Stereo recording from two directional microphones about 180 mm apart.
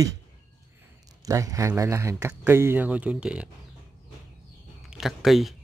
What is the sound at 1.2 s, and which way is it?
Speech, 20° right (ahead or behind).